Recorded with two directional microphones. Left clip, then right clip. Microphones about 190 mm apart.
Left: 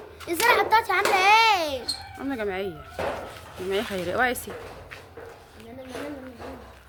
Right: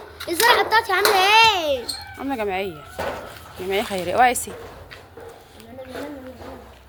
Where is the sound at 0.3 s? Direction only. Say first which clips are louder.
Right 3 dB; 15° left (ahead or behind).